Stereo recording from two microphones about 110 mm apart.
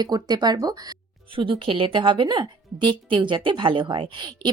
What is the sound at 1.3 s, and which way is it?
A woman's voice, 50° right (ahead or behind).